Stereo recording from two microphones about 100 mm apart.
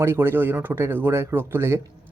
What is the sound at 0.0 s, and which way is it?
Speech, 25° right (ahead or behind).